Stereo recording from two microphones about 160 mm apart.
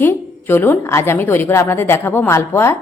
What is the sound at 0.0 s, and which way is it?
A woman's voice, 15° left (ahead or behind).